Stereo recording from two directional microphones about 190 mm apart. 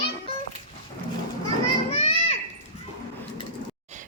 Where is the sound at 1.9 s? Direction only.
30° left (ahead or behind).